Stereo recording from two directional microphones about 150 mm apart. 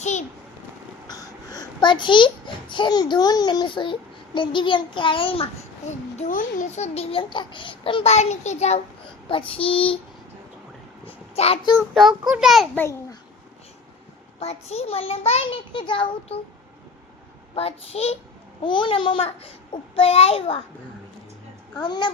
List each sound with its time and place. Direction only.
0.0 s a child's voice: 50° left (ahead or behind)
1.0 s a child's voice: 25° left (ahead or behind)
6.1 s a child's voice: 55° left (ahead or behind)
9.3 s a child's voice: 35° left (ahead or behind)
11.3 s a child's voice: 40° left (ahead or behind)
11.6 s child singing: 25° left (ahead or behind)
12.3 s a child's voice: centre (ahead or behind)
12.7 s a child's voice: 15° left (ahead or behind)
14.3 s a child's voice: 45° left (ahead or behind)
17.5 s a child's voice: 40° left (ahead or behind)
18.6 s a child's voice: 35° left (ahead or behind)
21.8 s child singing: 30° left (ahead or behind)